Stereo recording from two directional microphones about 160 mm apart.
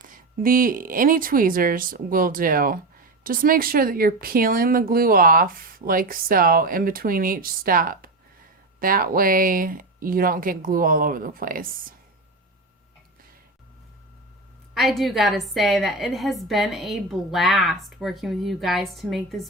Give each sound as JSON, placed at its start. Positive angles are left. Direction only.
{"t": 0.1, "sound": "speech", "side_deg": -60}
{"t": 14.7, "sound": "a woman's voice", "side_deg": 0}